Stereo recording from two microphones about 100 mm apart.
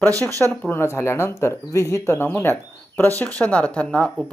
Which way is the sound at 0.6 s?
20° left (ahead or behind).